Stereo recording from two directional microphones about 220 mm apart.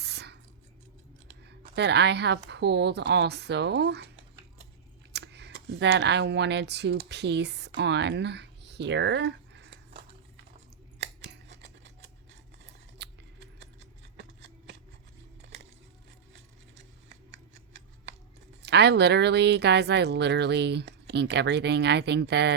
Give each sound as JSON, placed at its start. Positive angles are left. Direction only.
{"t": 0.0, "sound": "scissors", "side_deg": -50}
{"t": 1.7, "sound": "speech", "side_deg": -50}
{"t": 5.1, "sound": "speech", "side_deg": -50}
{"t": 11.2, "sound": "scissors", "side_deg": -55}
{"t": 13.0, "sound": "a sound", "side_deg": -55}
{"t": 16.3, "sound": "scissors", "side_deg": -50}
{"t": 18.6, "sound": "speech", "side_deg": -50}